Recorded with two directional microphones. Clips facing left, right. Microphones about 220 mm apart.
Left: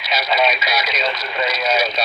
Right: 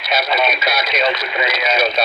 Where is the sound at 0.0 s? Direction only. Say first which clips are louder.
Right 1 dB; 55° right (ahead or behind).